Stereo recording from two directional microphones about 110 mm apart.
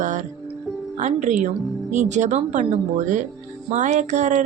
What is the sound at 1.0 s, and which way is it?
A woman's voice, 90° right.